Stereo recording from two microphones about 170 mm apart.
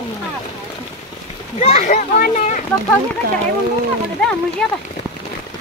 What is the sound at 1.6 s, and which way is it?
A child's voice, 45° left (ahead or behind).